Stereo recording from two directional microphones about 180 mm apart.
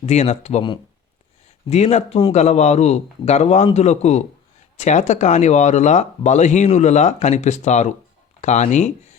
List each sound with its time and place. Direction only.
0.0 s speech: 35° left (ahead or behind)